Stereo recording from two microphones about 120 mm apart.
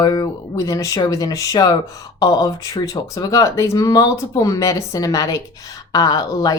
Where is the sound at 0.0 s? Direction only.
35° left (ahead or behind).